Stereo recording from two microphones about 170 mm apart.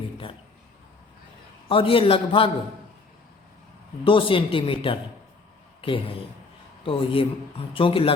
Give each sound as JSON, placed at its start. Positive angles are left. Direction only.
{"t": 1.6, "sound": "speech", "side_deg": 30}
{"t": 4.0, "sound": "speech", "side_deg": 30}